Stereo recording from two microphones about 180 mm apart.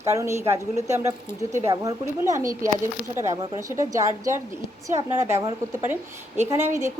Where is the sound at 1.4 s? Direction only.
15° right (ahead or behind).